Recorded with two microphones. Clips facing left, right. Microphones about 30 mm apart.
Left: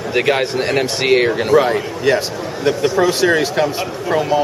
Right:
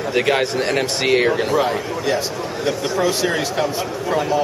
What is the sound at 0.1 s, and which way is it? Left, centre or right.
A man's voice, centre.